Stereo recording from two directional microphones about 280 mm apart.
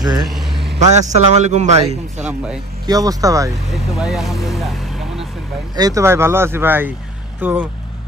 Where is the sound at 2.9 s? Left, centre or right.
Centre.